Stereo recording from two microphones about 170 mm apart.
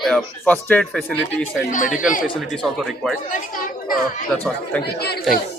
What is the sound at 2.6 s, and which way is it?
Speech, centre (ahead or behind).